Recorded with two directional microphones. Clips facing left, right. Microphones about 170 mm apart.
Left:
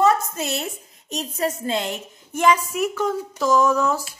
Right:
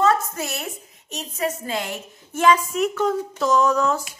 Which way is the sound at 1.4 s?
25° left (ahead or behind).